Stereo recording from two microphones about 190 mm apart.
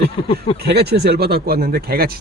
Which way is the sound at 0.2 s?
30° left (ahead or behind).